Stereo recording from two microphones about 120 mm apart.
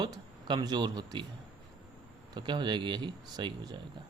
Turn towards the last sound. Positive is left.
turn(degrees=-40)  # may be behind; listen again after turning